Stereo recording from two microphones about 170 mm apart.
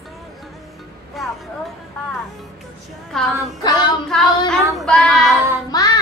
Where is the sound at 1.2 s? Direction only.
Centre (ahead or behind).